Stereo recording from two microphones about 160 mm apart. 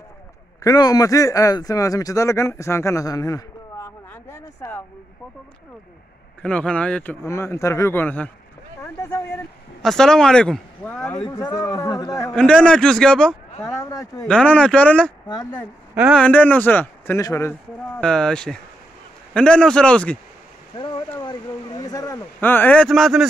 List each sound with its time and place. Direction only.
0.6 s speech: 25° left (ahead or behind)
6.4 s speech: 5° left (ahead or behind)
9.8 s speech: 5° left (ahead or behind); by 12.4 s 20° left (ahead or behind)
12.4 s speech: 5° left (ahead or behind)
13.6 s speech: 20° left (ahead or behind)
14.2 s speech: 5° left (ahead or behind)
15.2 s speech: 25° left (ahead or behind)
15.9 s a man's voice: 10° right (ahead or behind)
16.2 s speech: 10° left (ahead or behind)
20.7 s stream: 30° left (ahead or behind)
21.2 s speech: 25° left (ahead or behind); by 23.2 s centre (ahead or behind)